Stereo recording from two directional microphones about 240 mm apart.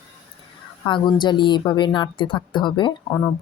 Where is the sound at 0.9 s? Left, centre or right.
Centre.